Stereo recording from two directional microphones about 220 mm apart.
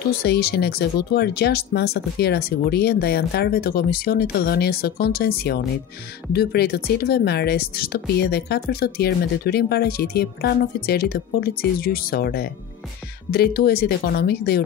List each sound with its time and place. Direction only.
0.1 s speech: 45° left (ahead or behind)